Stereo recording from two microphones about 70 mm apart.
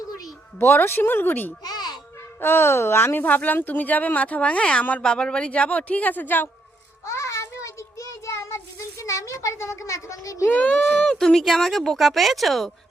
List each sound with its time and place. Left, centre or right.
0.6 s speech: left
1.6 s music: left
2.4 s speech: left
7.0 s child singing: left
10.5 s speech: centre